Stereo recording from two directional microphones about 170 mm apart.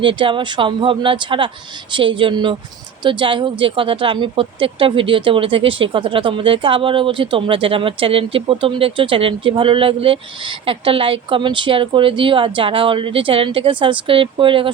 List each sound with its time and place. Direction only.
0.0 s speech: 30° right (ahead or behind)